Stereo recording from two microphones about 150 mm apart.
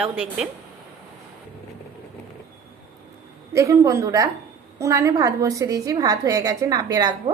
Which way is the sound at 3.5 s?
20° right (ahead or behind).